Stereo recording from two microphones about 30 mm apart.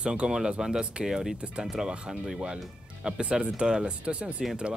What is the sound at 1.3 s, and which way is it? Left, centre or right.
Speech, right.